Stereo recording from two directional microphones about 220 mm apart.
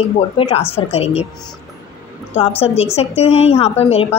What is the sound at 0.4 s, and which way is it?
Speech, 25° left (ahead or behind).